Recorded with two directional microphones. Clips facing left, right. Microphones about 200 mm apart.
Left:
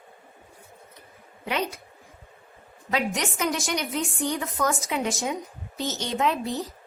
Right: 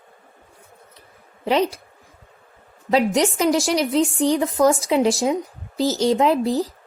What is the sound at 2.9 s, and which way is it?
A woman's voice, 30° right (ahead or behind).